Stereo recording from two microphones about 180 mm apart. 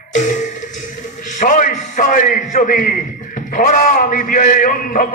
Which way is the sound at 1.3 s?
45° left (ahead or behind).